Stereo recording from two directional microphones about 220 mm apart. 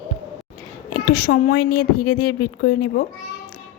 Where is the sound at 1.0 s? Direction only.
40° left (ahead or behind).